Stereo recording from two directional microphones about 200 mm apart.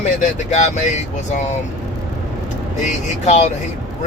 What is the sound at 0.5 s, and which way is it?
Speech, 35° left (ahead or behind).